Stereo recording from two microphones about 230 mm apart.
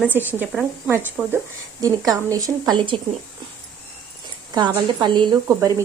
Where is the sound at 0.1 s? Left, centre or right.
Centre.